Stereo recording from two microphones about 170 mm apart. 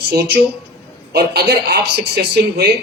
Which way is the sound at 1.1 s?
70° right (ahead or behind).